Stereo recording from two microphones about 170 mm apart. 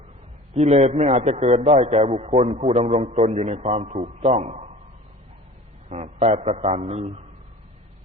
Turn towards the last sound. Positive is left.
turn(degrees=-40)  # may be behind; listen again after turning